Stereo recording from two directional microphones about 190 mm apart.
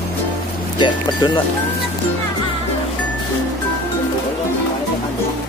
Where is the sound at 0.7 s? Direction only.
25° left (ahead or behind).